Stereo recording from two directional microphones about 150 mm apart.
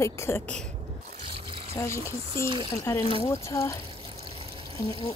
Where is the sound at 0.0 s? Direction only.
20° left (ahead or behind).